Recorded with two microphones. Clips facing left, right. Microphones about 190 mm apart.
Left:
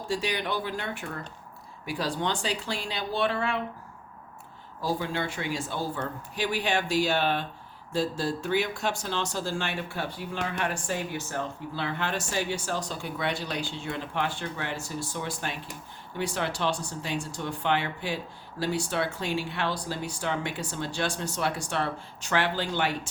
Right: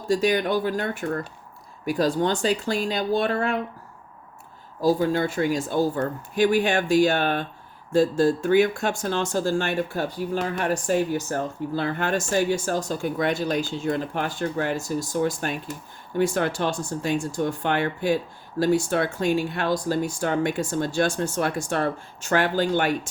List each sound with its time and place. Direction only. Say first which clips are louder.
0.1 s speech: right 9 dB; 45° right (ahead or behind)
4.8 s speech: right 9 dB; 40° right (ahead or behind)